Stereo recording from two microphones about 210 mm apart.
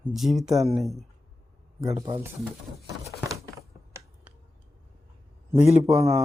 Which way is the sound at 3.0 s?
15° right (ahead or behind).